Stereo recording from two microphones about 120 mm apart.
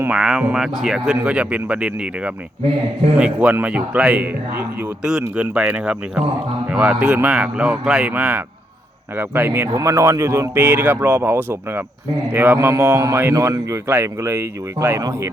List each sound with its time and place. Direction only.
0.1 s speech: 5° right (ahead or behind); by 15.3 s 25° right (ahead or behind)